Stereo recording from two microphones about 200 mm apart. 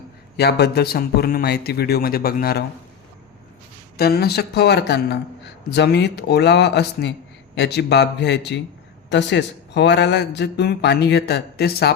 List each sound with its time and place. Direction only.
0.3 s a man's voice: 55° left (ahead or behind)
3.9 s speech: 50° left (ahead or behind)